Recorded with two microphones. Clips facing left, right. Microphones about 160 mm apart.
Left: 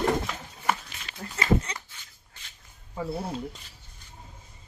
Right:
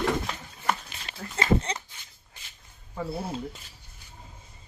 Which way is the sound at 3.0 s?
5° right (ahead or behind).